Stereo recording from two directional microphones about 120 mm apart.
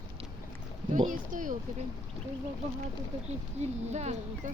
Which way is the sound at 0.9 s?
90° right.